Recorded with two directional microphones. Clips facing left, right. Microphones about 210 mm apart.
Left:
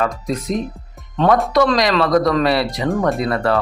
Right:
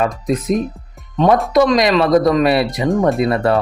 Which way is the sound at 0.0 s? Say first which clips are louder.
Right 3 dB; 20° right (ahead or behind).